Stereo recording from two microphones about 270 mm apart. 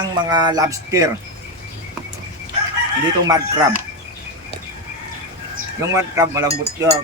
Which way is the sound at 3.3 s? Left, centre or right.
Centre.